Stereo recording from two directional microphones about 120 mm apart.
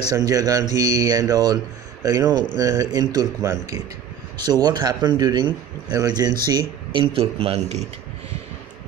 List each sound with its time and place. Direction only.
0.1 s a man's voice: 30° right (ahead or behind); by 7.8 s 55° right (ahead or behind)